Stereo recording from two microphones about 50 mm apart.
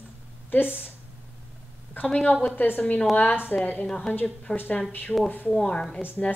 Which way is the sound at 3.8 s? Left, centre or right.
Centre.